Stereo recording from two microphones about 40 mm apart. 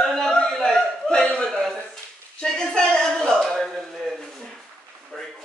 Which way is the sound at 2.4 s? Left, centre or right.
Centre.